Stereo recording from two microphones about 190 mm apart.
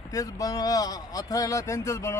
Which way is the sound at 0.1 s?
15° left (ahead or behind).